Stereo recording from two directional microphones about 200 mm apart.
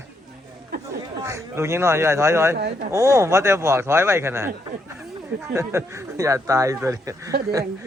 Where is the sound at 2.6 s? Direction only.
55° right (ahead or behind).